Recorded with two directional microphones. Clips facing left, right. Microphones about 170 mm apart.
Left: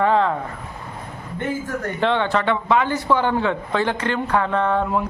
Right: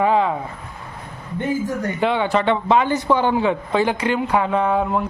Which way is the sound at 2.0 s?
10° right (ahead or behind).